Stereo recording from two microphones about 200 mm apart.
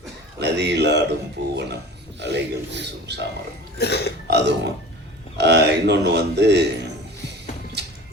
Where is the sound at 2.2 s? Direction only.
60° right (ahead or behind).